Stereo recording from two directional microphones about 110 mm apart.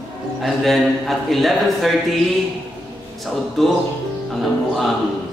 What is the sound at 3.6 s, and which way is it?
Speech, centre (ahead or behind).